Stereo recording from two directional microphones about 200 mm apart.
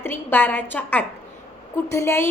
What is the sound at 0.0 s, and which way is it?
A woman's voice, 10° left (ahead or behind).